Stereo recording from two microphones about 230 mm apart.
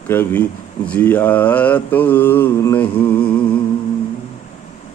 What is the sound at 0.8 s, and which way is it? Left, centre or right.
Mantra, centre.